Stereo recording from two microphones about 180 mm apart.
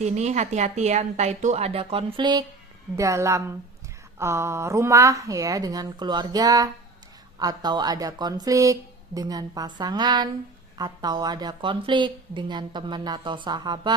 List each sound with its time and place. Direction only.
0.0 s a woman's voice: 40° right (ahead or behind)